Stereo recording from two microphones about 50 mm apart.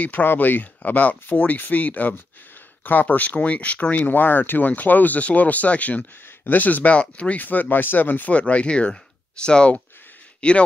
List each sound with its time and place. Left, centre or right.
0.0 s speech: left
8.3 s speech: left